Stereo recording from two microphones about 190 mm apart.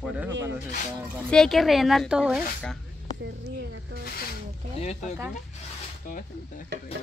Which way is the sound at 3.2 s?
65° right (ahead or behind).